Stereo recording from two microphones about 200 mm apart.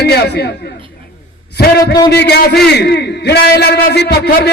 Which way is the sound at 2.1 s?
55° left (ahead or behind).